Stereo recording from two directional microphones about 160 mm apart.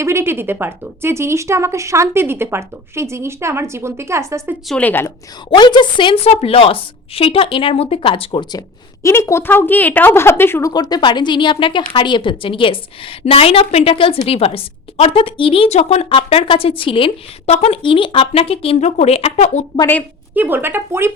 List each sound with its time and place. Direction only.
0.0 s speech: 15° right (ahead or behind)
4.7 s a woman's voice: 10° left (ahead or behind)
5.5 s a woman's voice: 25° left (ahead or behind)
9.0 s a woman's voice: 15° left (ahead or behind)
10.7 s a woman's voice: 25° left (ahead or behind); by 19.6 s 40° left (ahead or behind)
20.3 s speech: 10° right (ahead or behind)